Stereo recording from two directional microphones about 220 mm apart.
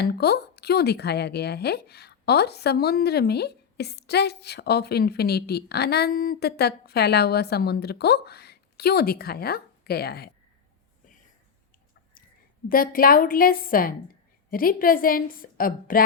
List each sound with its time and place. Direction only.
0.0 s a woman's voice: 45° left (ahead or behind)
12.6 s a woman's voice: 40° left (ahead or behind)